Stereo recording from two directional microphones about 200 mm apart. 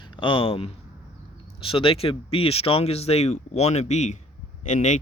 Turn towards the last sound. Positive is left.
turn(degrees=35)  # may be behind; listen again after turning